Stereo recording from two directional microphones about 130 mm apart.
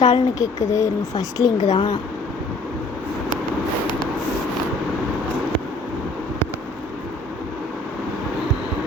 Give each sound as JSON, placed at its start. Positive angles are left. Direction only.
{"t": 0.0, "sound": "speech", "side_deg": 30}
{"t": 1.7, "sound": "speech", "side_deg": 40}